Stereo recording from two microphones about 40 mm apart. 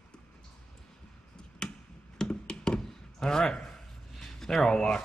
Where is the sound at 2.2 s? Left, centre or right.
Left.